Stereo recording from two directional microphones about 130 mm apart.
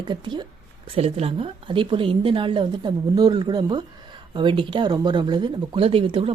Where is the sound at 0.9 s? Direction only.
50° right (ahead or behind).